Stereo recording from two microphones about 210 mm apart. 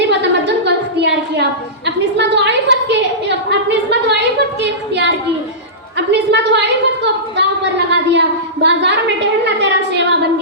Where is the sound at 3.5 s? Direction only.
55° right (ahead or behind).